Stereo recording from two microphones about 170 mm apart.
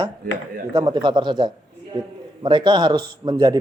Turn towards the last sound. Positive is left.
turn(degrees=-25)  # may be behind; listen again after turning